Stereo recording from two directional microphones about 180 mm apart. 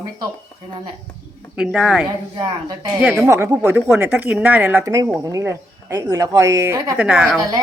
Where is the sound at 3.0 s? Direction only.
5° right (ahead or behind).